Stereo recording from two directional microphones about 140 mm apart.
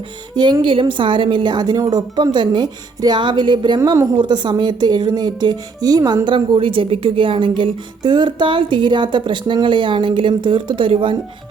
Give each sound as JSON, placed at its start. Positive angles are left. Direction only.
{"t": 0.3, "sound": "a woman's voice", "side_deg": -30}
{"t": 3.8, "sound": "a woman's voice", "side_deg": -20}